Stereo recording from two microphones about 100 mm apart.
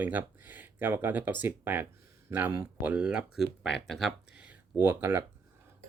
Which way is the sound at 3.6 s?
Centre (ahead or behind).